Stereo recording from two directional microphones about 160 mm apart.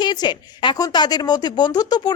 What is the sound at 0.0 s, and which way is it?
A woman's voice, 25° left (ahead or behind).